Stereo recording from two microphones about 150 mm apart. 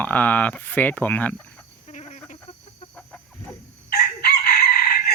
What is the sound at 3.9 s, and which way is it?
Chicken, 90° left.